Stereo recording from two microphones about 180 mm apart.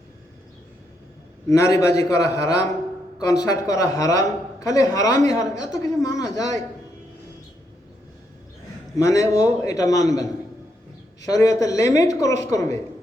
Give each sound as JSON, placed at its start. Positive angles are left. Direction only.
{"t": 1.5, "sound": "a woman's voice", "side_deg": 15}
{"t": 9.0, "sound": "a man's voice", "side_deg": 15}
{"t": 11.3, "sound": "a woman's voice", "side_deg": 20}